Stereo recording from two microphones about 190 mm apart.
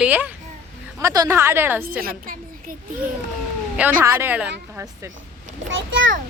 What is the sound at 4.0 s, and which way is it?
A woman's voice, 10° right (ahead or behind).